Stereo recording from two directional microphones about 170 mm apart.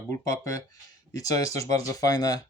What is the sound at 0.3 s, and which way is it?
Speech, 20° left (ahead or behind).